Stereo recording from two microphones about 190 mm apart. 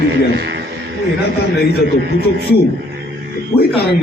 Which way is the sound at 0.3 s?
65° right (ahead or behind).